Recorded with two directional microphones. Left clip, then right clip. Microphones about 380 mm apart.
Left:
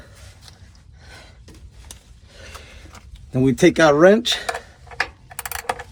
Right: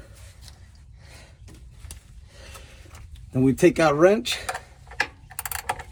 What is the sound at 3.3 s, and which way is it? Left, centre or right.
Speech, left.